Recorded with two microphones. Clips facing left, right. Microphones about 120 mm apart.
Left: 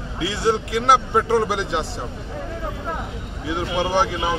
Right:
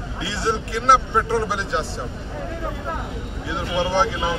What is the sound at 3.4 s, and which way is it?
Speech, 15° left (ahead or behind).